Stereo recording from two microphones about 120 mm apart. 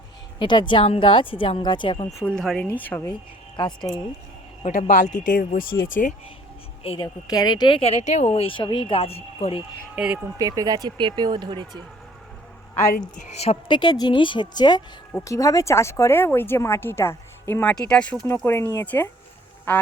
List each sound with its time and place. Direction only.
0.3 s a woman's voice: 40° left (ahead or behind)
2.2 s speech: 5° left (ahead or behind)
2.7 s speech: 15° left (ahead or behind)
3.6 s a woman's voice: 40° left (ahead or behind)
4.6 s speech: 80° left
6.8 s speech: 55° left (ahead or behind)
7.3 s a woman's voice: 35° left (ahead or behind)
7.8 s speech: 65° left (ahead or behind)
9.9 s speech: 10° right (ahead or behind)
10.3 s speech: 30° right (ahead or behind)
13.1 s speech: 75° left (ahead or behind)
13.7 s a woman's voice: 40° left (ahead or behind)
15.2 s speech: 25° left (ahead or behind); by 18.2 s 10° left (ahead or behind)
18.4 s speech: 20° left (ahead or behind)